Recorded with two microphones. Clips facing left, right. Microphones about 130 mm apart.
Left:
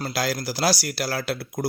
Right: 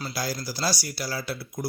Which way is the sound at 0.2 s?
85° left.